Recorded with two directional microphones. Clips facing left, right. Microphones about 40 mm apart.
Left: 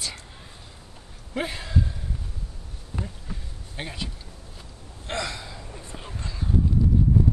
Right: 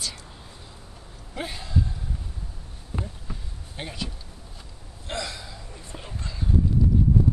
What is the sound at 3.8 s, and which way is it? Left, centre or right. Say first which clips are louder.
Speech: even; centre.